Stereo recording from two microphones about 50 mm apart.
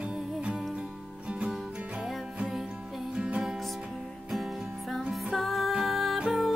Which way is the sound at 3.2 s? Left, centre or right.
Centre.